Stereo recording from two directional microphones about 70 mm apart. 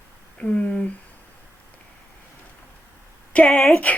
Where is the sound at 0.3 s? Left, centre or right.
Centre.